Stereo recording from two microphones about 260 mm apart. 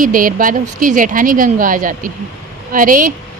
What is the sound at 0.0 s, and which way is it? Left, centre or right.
A woman's voice, right.